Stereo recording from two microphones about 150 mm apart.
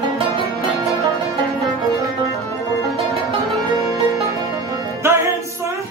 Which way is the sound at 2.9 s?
Centre (ahead or behind).